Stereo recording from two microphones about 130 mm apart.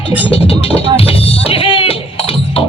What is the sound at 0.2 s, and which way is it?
Music, 45° left (ahead or behind).